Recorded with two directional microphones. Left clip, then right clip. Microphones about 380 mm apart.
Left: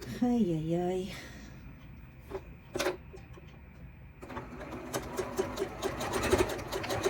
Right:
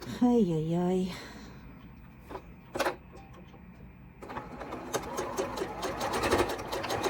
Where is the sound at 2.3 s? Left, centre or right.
Centre.